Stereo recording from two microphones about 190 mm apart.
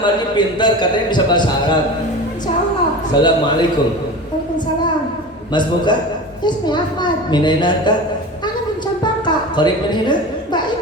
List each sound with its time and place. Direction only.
0.0 s a man's voice: 25° left (ahead or behind)
3.1 s a man's voice: 25° left (ahead or behind)
5.5 s a man's voice: 25° left (ahead or behind)
9.2 s a woman's voice: 25° left (ahead or behind)